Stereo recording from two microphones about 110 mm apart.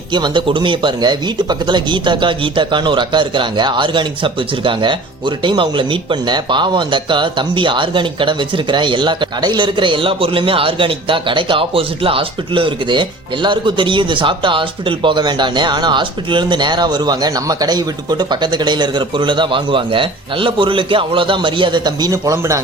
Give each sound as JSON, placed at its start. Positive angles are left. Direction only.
{"t": 0.1, "sound": "speech", "side_deg": -45}